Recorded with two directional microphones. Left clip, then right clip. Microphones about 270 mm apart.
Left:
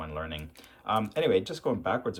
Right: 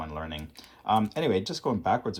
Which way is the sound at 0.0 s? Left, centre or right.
Centre.